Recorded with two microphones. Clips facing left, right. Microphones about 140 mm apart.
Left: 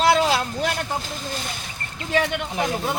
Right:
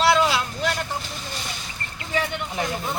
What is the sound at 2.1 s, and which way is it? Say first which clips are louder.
Speech: left 4 dB; 80° left.